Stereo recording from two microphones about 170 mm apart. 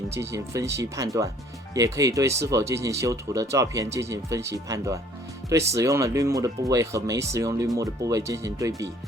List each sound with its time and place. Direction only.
0.1 s speech: 15° right (ahead or behind)